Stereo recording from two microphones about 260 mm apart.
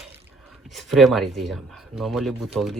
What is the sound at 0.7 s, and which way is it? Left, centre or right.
Speech, centre.